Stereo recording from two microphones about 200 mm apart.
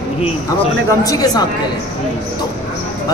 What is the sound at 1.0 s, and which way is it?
Speech, 20° left (ahead or behind).